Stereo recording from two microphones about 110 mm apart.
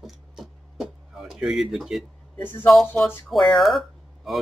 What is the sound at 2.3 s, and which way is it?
Speech, 15° left (ahead or behind).